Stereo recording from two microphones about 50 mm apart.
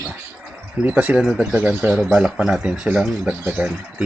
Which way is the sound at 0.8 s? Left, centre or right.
Right.